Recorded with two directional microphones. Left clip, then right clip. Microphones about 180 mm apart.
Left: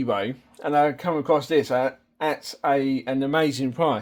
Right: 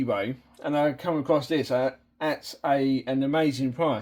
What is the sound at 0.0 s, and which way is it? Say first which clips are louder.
Speech: left 2 dB; 45° left (ahead or behind).